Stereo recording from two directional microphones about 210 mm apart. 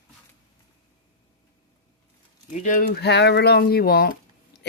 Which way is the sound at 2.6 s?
40° left (ahead or behind).